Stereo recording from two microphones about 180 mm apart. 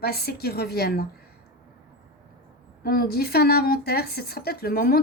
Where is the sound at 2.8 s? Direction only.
60° left (ahead or behind).